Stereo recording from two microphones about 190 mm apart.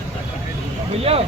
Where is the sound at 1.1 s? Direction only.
30° right (ahead or behind).